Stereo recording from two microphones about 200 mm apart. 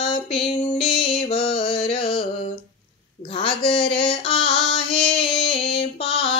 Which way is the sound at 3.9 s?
30° left (ahead or behind).